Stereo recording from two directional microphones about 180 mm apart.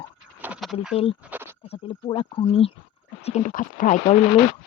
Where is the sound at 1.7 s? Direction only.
30° left (ahead or behind).